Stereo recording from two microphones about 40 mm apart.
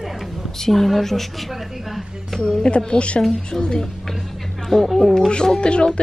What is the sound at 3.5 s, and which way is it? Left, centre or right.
A woman's voice, centre.